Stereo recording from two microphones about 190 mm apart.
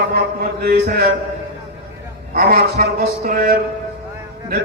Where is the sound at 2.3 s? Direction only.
50° right (ahead or behind).